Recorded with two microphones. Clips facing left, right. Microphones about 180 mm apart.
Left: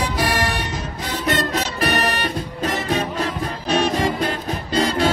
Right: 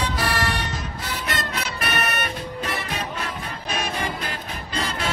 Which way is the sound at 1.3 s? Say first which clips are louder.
Left 7 dB; 35° left (ahead or behind).